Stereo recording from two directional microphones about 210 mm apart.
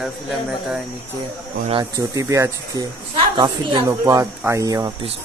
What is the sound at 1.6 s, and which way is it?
Speech, 20° right (ahead or behind).